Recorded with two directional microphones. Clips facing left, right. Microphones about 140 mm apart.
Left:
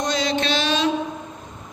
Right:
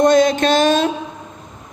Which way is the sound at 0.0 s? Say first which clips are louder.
Right 10 dB; 50° right (ahead or behind).